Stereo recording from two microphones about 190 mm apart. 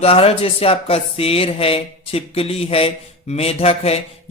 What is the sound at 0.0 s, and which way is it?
Speech, 30° left (ahead or behind).